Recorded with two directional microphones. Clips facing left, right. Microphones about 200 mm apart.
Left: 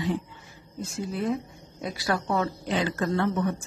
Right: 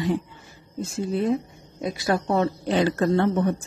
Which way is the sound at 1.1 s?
25° right (ahead or behind).